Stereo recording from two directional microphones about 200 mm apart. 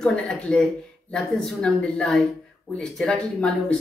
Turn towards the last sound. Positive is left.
turn(degrees=5)  # may be behind; listen again after turning